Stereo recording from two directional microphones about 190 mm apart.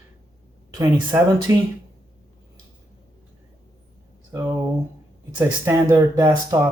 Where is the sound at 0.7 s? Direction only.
20° right (ahead or behind).